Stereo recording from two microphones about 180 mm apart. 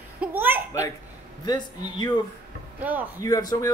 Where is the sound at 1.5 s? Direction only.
25° left (ahead or behind).